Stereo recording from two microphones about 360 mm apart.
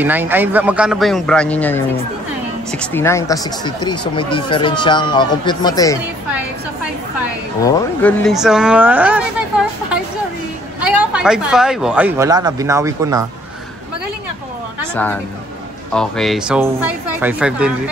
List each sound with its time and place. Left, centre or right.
0.0 s speech: centre
7.6 s speech: centre
10.8 s speech: centre
15.9 s speech: centre